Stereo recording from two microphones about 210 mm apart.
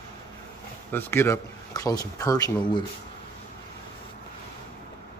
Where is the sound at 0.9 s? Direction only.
10° left (ahead or behind).